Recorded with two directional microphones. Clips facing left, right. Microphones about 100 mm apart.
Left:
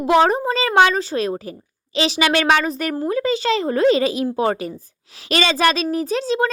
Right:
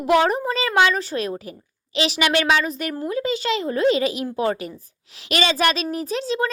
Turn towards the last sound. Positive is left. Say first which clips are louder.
# left 4 dB
turn(degrees=35)  # may be behind; listen again after turning